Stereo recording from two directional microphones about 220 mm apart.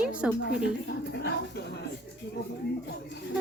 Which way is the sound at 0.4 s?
50° left (ahead or behind).